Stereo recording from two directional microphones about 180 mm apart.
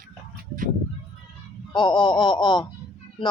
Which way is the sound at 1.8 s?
25° left (ahead or behind).